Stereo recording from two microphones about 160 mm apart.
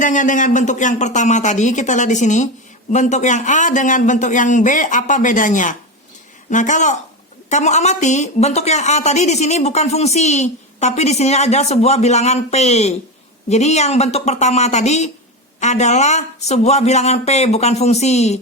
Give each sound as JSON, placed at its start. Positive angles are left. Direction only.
{"t": 0.0, "sound": "speech", "side_deg": 50}